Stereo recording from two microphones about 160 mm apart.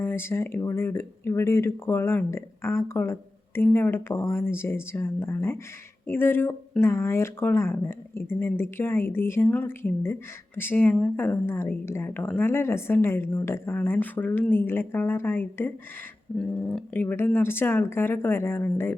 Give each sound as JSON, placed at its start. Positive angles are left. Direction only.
{"t": 0.0, "sound": "speech", "side_deg": 15}